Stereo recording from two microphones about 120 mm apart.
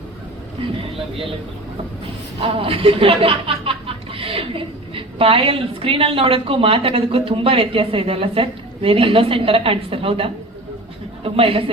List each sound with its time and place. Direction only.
0.6 s speech: 50° right (ahead or behind)
2.4 s speech: 50° right (ahead or behind)